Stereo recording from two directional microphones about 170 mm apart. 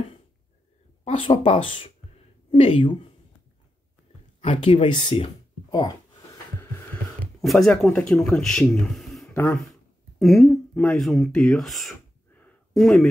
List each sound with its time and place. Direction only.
1.0 s speech: 35° left (ahead or behind)
4.4 s speech: 30° left (ahead or behind)
7.2 s a man's voice: centre (ahead or behind)
9.3 s speech: 15° left (ahead or behind)
9.6 s speech: centre (ahead or behind)
11.5 s a sound: centre (ahead or behind)